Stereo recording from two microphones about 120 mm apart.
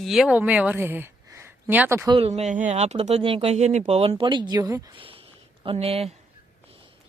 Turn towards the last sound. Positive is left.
turn(degrees=-55)  # may be behind; listen again after turning